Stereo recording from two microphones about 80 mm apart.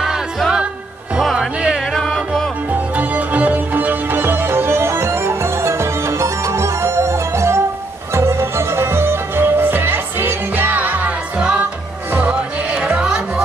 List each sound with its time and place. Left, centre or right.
1.2 s music: centre
2.7 s music: centre